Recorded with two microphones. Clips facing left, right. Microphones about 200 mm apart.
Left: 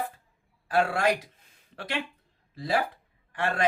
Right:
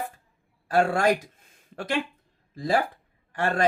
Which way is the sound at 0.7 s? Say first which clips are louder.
Right 3 dB; 45° right (ahead or behind).